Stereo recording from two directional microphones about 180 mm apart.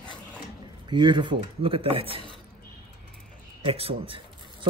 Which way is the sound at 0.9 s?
25° right (ahead or behind).